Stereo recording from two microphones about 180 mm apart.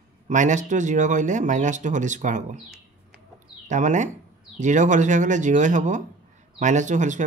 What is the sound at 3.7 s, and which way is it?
Speech, 45° right (ahead or behind).